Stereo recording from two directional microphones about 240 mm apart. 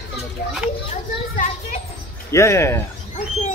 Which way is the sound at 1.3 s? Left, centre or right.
Left.